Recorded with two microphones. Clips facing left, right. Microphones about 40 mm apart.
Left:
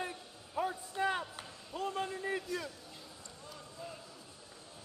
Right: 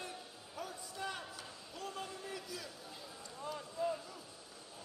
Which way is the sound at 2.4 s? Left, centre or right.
Centre.